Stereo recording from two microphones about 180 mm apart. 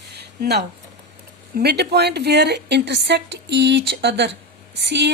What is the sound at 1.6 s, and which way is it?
Speech, 60° right (ahead or behind).